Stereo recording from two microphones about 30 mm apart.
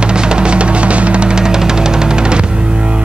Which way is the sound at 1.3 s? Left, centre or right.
Right.